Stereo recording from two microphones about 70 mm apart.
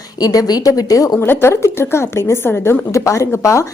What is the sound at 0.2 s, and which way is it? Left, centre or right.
A woman's voice, left.